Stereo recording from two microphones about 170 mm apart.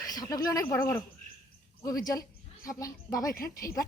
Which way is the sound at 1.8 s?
20° left (ahead or behind).